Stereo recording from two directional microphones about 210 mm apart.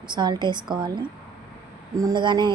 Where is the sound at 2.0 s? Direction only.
20° right (ahead or behind).